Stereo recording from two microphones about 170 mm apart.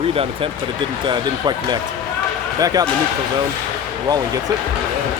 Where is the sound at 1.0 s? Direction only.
25° right (ahead or behind).